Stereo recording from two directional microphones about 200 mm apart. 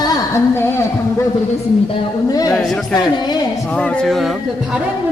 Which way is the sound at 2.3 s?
20° left (ahead or behind).